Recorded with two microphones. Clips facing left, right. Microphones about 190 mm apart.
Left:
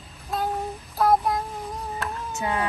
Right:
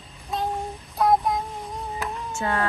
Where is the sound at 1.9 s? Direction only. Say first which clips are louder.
Right 2 dB; centre (ahead or behind).